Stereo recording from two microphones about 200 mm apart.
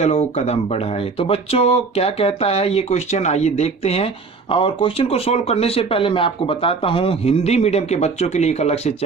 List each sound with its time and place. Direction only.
0.0 s speech: 35° left (ahead or behind)